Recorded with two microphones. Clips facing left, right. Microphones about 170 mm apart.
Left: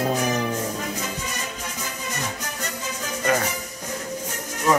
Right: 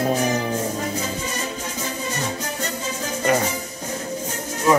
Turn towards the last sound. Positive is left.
turn(degrees=-25)  # may be behind; listen again after turning